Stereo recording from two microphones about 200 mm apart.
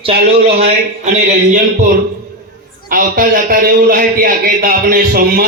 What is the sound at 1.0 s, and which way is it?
Speech, 35° right (ahead or behind).